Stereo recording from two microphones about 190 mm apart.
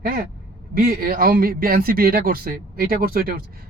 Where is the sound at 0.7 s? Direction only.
50° right (ahead or behind).